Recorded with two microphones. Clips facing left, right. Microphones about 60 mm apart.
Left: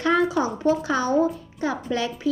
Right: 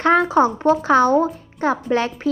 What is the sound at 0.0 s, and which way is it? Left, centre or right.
A woman's voice, right.